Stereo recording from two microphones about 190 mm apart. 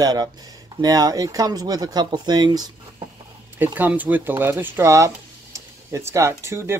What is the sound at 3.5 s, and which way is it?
Speech, 10° right (ahead or behind).